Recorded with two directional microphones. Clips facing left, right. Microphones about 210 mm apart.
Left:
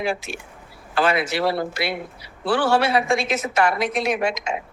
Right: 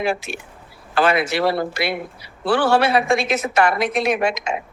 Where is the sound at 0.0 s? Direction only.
65° right (ahead or behind).